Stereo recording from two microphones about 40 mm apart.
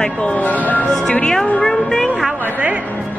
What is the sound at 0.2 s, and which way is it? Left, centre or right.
Speech, left.